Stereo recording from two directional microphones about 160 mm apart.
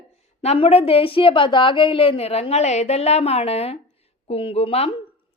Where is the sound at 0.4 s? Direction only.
40° left (ahead or behind).